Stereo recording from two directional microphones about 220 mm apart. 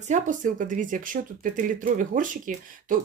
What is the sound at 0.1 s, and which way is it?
Speech, 35° right (ahead or behind).